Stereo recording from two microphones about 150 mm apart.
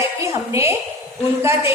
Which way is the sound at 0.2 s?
20° right (ahead or behind).